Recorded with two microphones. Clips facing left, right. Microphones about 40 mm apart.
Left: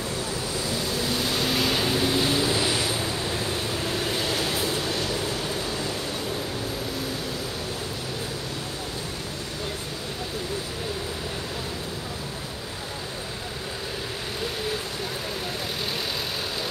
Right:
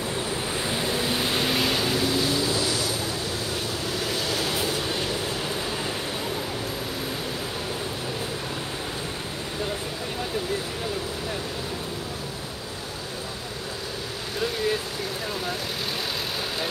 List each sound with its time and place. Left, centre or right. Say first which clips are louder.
0.6 s waves: right 1 dB; right; by 1.8 s centre
1.8 s a sound: even; centre
2.0 s vehicle: left 1 dB; centre
4.6 s train: even; centre